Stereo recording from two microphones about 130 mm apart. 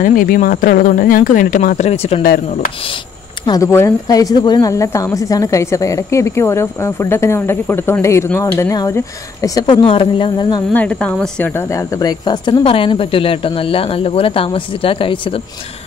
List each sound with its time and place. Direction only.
0.0 s speech: 90° left; by 2.2 s 50° left (ahead or behind)
3.4 s a woman's voice: 25° left (ahead or behind)
9.8 s speech: 40° left (ahead or behind)
10.7 s speech: 10° left (ahead or behind); by 15.4 s 45° left (ahead or behind)